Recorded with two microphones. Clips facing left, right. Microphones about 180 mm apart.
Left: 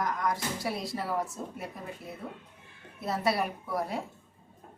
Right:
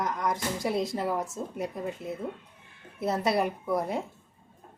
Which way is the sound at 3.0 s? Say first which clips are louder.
Right 3 dB; 20° right (ahead or behind).